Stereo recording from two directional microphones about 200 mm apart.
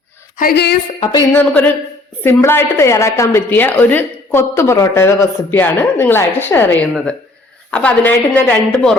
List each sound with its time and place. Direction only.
0.3 s a woman's voice: 50° left (ahead or behind)
0.9 s a woman's voice: 20° left (ahead or behind)